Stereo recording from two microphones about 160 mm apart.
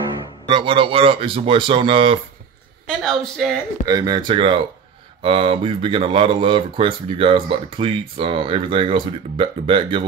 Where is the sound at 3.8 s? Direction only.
25° right (ahead or behind).